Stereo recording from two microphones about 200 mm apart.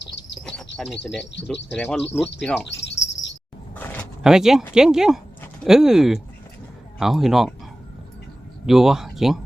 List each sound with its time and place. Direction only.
0.0 s bird: 60° left (ahead or behind)
1.0 s speech: centre (ahead or behind)
2.6 s cricket: 65° left (ahead or behind)
3.8 s a sound: 10° left (ahead or behind)
4.2 s speech: 5° right (ahead or behind)
8.6 s speech: centre (ahead or behind)